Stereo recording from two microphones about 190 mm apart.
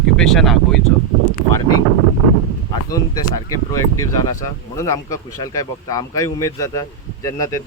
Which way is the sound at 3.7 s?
15° left (ahead or behind).